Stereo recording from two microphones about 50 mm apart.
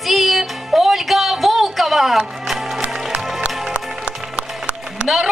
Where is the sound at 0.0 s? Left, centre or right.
Centre.